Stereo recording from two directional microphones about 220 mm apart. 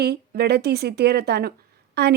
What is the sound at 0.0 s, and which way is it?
Speech, 45° right (ahead or behind).